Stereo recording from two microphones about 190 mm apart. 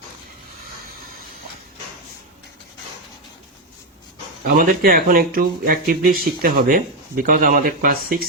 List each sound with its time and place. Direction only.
4.4 s speech: 50° right (ahead or behind)